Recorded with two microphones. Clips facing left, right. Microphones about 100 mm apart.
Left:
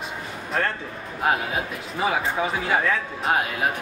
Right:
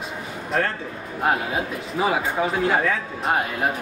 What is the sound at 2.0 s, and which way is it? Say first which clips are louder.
Speech: right 1 dB; centre (ahead or behind).